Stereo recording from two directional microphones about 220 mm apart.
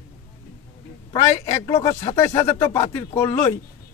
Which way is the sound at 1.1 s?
15° left (ahead or behind).